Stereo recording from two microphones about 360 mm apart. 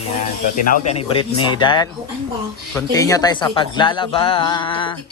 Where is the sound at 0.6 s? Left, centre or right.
Centre.